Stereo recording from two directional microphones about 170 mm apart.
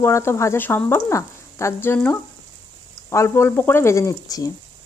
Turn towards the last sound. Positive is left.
turn(degrees=20)  # may be behind; listen again after turning